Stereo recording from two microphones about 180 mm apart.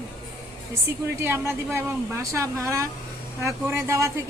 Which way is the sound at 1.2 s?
15° right (ahead or behind).